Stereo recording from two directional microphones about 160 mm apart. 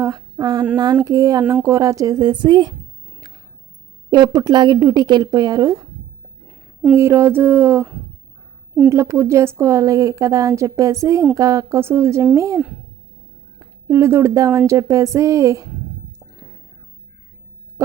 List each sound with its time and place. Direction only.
0.0 s speech: 25° right (ahead or behind)
4.1 s speech: 25° right (ahead or behind)
6.9 s a woman's voice: 15° right (ahead or behind)
17.8 s music: 20° right (ahead or behind)